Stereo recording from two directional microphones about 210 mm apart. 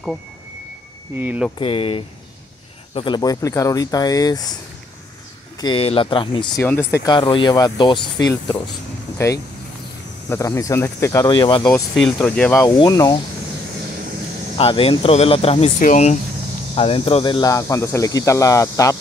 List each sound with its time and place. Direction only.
1.1 s speech: 10° right (ahead or behind)
1.6 s speech: 25° left (ahead or behind)
5.6 s speech: 25° left (ahead or behind)
6.5 s speech: 10° left (ahead or behind)
10.3 s speech: 15° left (ahead or behind)
12.1 s speech: 5° left (ahead or behind)
12.6 s speech: 20° left (ahead or behind)
14.6 s speech: 25° left (ahead or behind)